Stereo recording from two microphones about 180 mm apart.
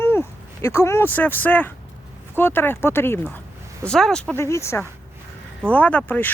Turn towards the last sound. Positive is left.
turn(degrees=10)  # may be behind; listen again after turning